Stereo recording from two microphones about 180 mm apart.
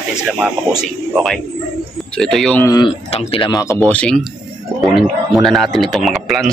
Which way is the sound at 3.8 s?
5° left (ahead or behind).